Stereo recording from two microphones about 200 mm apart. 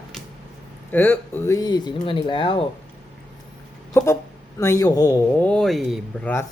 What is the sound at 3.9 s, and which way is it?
A woman's voice, 15° left (ahead or behind).